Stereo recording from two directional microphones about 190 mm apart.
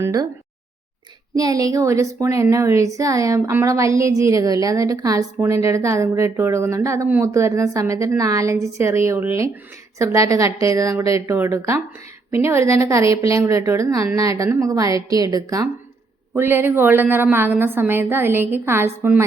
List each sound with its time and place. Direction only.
0.0 s a woman's voice: 20° right (ahead or behind)
1.4 s a woman's voice: 20° right (ahead or behind)